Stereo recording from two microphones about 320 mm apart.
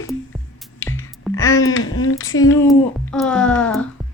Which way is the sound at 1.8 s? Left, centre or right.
Left.